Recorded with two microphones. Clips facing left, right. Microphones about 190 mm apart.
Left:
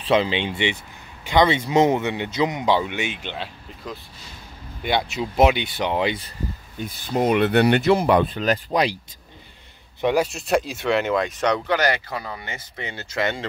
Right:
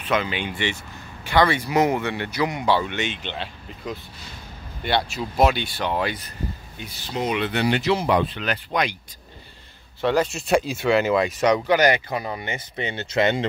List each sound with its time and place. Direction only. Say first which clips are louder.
0.0 s speech: left 4 dB; 30° left (ahead or behind); by 3.2 s 10° left (ahead or behind)
4.8 s speech: left 1 dB; 15° left (ahead or behind)
6.8 s speech: left 6 dB; 50° left (ahead or behind); by 8.9 s 35° left (ahead or behind)
10.0 s speech: left 1 dB; 10° left (ahead or behind)
10.3 s speech: right 1 dB; centre (ahead or behind); by 13.5 s 20° right (ahead or behind)